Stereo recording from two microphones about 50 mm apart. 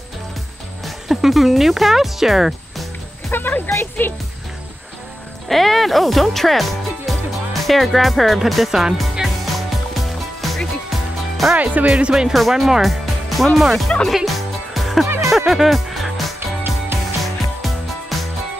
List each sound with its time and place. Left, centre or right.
0.8 s speech: centre
3.3 s music: left
4.0 s speech: left
5.5 s speech: centre
9.9 s music: centre
11.5 s speech: right
11.9 s speech: centre
12.3 s speech: centre
14.0 s music: centre
16.3 s music: right
17.2 s music: centre